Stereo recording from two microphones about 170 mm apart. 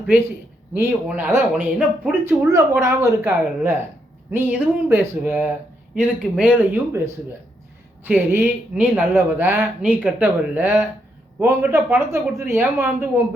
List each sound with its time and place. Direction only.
0.7 s speech: 10° right (ahead or behind)